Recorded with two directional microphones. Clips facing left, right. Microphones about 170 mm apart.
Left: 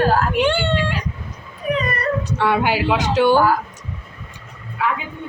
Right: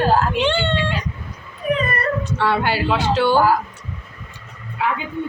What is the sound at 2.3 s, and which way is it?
Speech, 15° left (ahead or behind).